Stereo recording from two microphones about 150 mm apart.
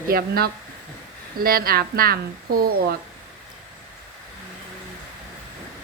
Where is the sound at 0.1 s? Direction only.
85° right.